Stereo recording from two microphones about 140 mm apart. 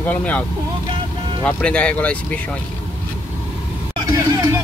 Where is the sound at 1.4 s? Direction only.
10° left (ahead or behind).